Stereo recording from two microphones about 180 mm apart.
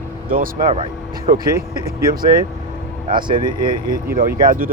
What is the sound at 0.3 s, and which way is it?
Speech, 50° right (ahead or behind).